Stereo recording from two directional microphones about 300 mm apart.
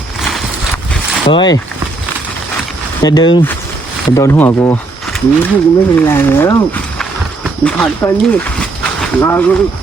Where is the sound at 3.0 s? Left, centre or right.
Centre.